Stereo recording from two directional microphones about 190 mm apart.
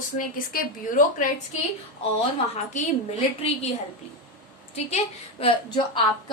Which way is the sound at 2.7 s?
35° left (ahead or behind).